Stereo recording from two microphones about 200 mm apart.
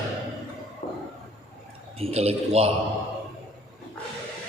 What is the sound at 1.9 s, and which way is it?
Speech, 30° right (ahead or behind).